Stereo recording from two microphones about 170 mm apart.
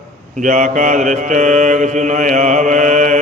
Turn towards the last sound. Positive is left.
turn(degrees=-50)  # may be behind; listen again after turning